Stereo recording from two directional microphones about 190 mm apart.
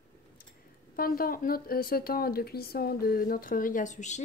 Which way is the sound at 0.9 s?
50° left (ahead or behind).